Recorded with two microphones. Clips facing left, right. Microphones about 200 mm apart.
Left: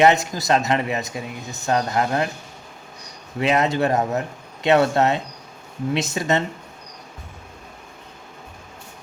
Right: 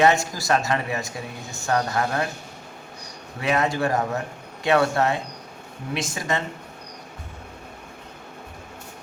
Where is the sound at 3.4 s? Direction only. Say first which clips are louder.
Left 3 dB; 20° left (ahead or behind).